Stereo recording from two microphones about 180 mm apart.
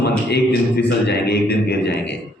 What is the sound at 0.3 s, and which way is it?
A man's voice, 70° left (ahead or behind).